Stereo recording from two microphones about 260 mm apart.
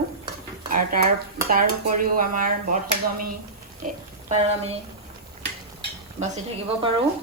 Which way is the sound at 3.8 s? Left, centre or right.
Right.